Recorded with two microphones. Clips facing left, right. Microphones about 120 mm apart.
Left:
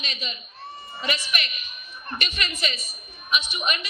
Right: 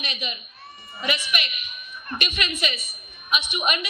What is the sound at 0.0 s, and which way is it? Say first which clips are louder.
Speech: right 2 dB; 15° right (ahead or behind).